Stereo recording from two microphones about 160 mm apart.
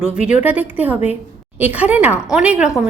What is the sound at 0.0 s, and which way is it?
A woman's voice, 10° right (ahead or behind).